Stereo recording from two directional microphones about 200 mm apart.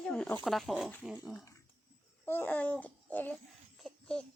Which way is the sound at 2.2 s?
10° left (ahead or behind).